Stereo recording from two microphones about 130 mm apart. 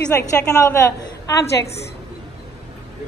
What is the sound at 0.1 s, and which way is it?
A woman's voice, 20° left (ahead or behind).